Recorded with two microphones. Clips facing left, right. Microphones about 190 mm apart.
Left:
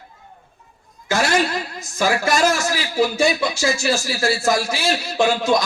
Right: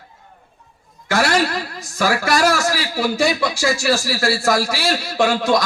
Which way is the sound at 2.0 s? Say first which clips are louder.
Right 1 dB; 20° left (ahead or behind).